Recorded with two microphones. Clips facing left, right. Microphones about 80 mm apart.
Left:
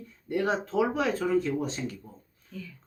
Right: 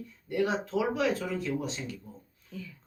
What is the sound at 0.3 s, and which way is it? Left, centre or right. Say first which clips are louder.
Speech: left 1 dB; left.